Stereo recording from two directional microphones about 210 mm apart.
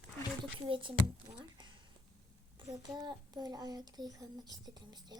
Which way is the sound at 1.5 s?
20° right (ahead or behind).